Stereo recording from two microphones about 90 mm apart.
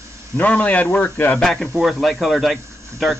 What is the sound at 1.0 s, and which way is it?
Speech, 30° left (ahead or behind).